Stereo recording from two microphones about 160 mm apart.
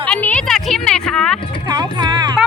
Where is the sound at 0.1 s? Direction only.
10° left (ahead or behind).